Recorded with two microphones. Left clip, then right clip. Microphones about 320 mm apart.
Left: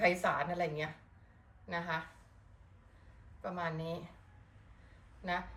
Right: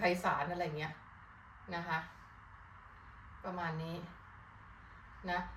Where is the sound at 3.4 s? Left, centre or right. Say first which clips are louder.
Left 2 dB; centre.